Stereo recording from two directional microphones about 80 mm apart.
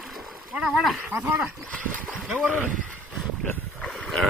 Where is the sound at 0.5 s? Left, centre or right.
Centre.